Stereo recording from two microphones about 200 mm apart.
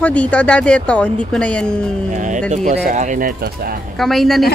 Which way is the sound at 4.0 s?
Centre (ahead or behind).